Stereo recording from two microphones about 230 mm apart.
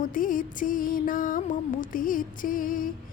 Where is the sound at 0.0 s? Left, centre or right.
Left.